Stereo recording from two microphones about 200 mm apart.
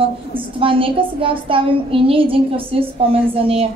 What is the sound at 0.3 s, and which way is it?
A woman's voice, 25° right (ahead or behind).